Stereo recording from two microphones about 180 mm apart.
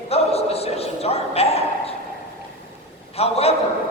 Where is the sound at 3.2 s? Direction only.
35° left (ahead or behind).